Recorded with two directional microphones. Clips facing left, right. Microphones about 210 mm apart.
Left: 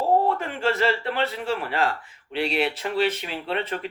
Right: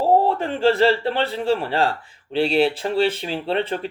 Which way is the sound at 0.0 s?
30° right (ahead or behind).